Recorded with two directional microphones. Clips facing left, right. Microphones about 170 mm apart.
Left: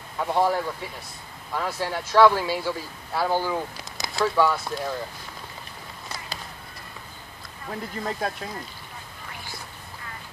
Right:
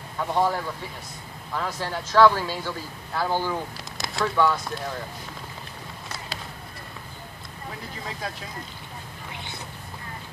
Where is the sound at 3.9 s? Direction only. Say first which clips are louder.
Left 2 dB; centre (ahead or behind).